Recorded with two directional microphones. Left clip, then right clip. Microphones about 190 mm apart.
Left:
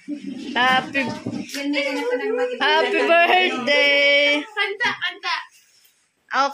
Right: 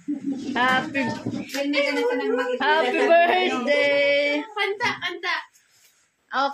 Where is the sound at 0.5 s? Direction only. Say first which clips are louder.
Left 3 dB; centre (ahead or behind).